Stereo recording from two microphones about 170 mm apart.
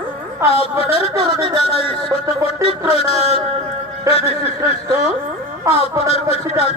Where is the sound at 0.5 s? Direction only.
35° left (ahead or behind).